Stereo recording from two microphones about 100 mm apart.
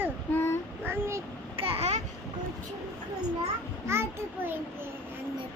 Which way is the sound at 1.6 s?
80° right.